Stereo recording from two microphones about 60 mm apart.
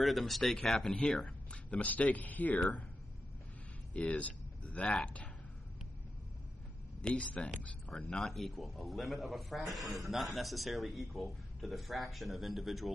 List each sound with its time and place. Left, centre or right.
0.0 s a man's voice: centre
1.2 s speech: left
3.9 s speech: left
7.0 s speech: centre
7.9 s a man's voice: centre